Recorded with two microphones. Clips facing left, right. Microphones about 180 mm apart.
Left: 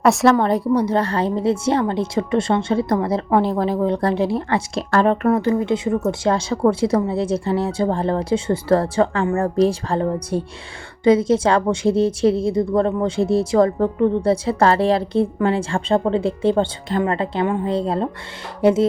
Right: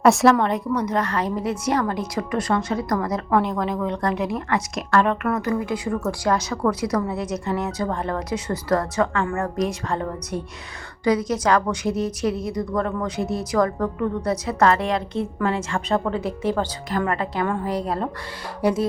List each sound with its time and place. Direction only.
0.0 s a woman's voice: centre (ahead or behind)
0.3 s a woman's voice: 35° left (ahead or behind)